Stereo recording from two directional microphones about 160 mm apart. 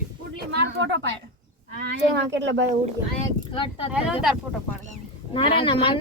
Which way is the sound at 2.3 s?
90° right.